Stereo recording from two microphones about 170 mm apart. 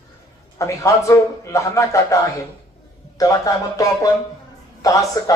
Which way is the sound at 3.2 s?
20° left (ahead or behind).